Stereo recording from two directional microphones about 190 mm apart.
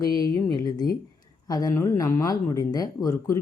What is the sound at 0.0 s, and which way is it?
Speech, 20° left (ahead or behind).